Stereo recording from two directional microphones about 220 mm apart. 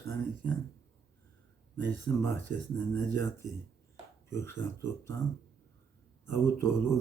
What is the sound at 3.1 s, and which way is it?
Speech, 15° left (ahead or behind).